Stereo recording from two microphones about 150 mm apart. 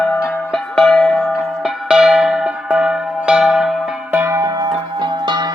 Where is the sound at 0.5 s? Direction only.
5° left (ahead or behind).